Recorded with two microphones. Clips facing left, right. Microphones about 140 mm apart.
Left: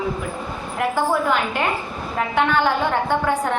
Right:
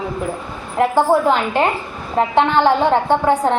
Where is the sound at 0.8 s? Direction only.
30° right (ahead or behind).